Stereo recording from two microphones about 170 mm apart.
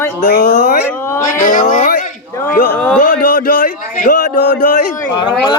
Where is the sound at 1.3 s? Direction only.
50° left (ahead or behind).